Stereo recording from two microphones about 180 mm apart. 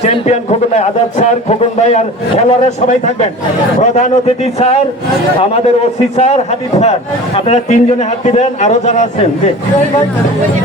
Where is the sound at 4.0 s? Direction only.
35° left (ahead or behind).